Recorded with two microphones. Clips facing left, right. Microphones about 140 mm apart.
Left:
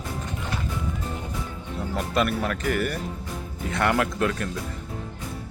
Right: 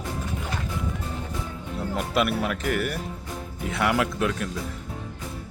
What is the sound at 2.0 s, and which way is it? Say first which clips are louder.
Speech: even; 5° right (ahead or behind).